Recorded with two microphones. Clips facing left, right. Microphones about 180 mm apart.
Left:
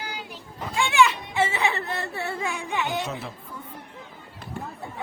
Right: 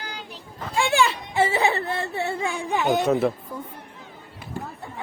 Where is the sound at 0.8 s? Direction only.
35° right (ahead or behind); by 3.3 s 55° right (ahead or behind).